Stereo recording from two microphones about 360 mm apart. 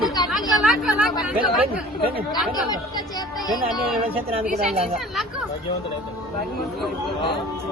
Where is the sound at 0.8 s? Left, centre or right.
Centre.